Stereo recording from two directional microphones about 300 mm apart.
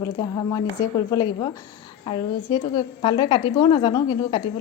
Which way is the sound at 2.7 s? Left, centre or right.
Centre.